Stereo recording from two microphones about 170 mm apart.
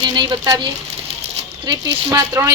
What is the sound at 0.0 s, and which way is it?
A woman's voice, 25° right (ahead or behind).